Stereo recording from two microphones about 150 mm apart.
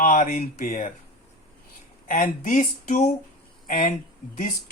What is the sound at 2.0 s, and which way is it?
Speech, 65° left (ahead or behind).